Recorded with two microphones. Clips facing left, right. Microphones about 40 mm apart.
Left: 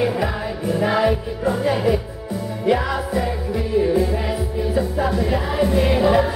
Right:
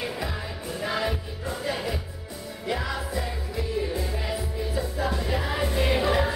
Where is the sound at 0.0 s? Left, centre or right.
Left.